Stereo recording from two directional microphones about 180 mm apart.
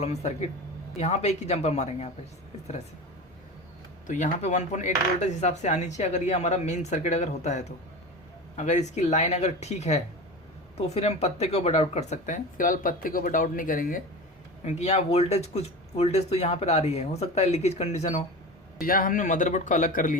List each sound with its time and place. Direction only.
0.0 s speech: 35° left (ahead or behind)
4.0 s speech: 45° left (ahead or behind)
14.6 s speech: 40° left (ahead or behind)
18.8 s speech: 50° left (ahead or behind)